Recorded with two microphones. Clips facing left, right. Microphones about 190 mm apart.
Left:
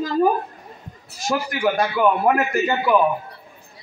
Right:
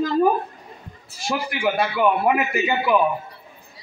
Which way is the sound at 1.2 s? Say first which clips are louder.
Left 3 dB; 45° left (ahead or behind).